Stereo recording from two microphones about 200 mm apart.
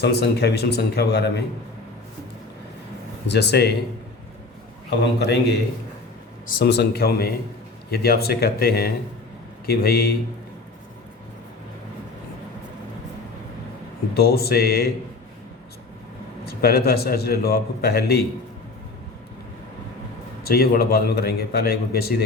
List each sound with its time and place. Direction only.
0.0 s a man's voice: 55° left (ahead or behind)
3.2 s a man's voice: 55° left (ahead or behind)
4.9 s a man's voice: 55° left (ahead or behind)
14.2 s a man's voice: 50° left (ahead or behind)
16.5 s a man's voice: 50° left (ahead or behind)
20.4 s a man's voice: 50° left (ahead or behind)